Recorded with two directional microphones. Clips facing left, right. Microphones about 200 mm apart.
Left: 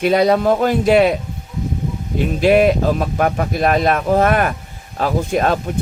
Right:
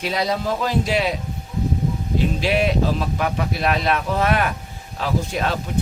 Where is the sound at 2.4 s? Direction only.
50° left (ahead or behind).